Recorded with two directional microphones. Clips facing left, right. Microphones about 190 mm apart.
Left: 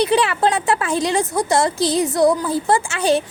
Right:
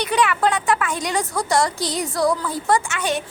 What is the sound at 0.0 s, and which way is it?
A woman's voice, 30° left (ahead or behind).